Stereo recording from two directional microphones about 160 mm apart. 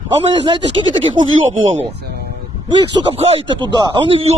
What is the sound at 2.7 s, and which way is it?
Speech, 35° right (ahead or behind).